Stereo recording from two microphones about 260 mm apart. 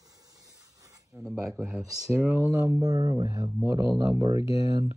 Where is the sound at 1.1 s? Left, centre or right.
Centre.